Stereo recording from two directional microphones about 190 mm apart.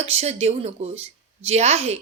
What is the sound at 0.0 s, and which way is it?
A woman's voice, 35° right (ahead or behind).